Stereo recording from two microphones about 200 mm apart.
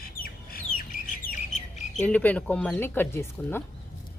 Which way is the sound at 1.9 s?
10° left (ahead or behind).